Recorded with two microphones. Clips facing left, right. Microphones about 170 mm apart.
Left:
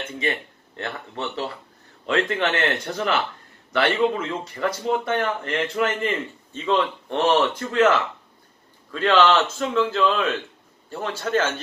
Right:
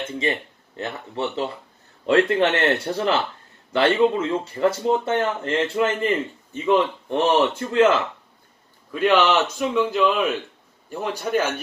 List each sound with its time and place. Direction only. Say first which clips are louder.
0.2 s speech: right 1 dB; 20° right (ahead or behind)
2.0 s speech: right 5 dB; 35° right (ahead or behind)
8.9 s a man's voice: even; 15° right (ahead or behind)